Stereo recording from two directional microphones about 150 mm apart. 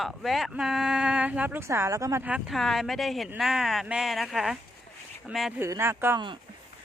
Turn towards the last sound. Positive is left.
turn(degrees=-15)  # may be behind; listen again after turning